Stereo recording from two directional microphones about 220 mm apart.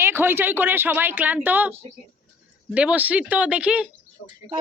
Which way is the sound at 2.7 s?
5° right (ahead or behind).